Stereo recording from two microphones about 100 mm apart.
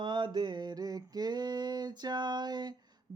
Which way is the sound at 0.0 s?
50° right (ahead or behind).